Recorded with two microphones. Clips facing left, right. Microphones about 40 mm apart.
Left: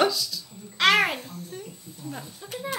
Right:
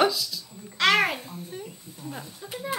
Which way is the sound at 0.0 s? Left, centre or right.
Centre.